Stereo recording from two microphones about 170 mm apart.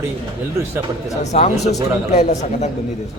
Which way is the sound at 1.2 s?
40° left (ahead or behind).